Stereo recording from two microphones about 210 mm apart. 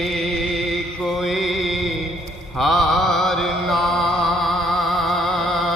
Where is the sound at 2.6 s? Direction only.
Centre (ahead or behind).